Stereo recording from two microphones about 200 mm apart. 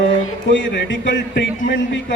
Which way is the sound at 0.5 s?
65° left (ahead or behind).